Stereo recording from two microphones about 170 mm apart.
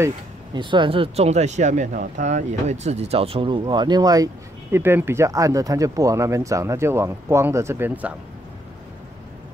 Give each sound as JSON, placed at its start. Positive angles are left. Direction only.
{"t": 0.6, "sound": "speech", "side_deg": -30}